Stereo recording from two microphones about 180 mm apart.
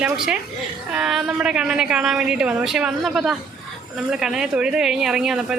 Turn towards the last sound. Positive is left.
turn(degrees=-5)  # may be behind; listen again after turning